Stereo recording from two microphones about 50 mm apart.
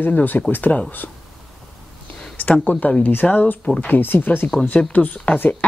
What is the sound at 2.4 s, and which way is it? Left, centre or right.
Speech, left.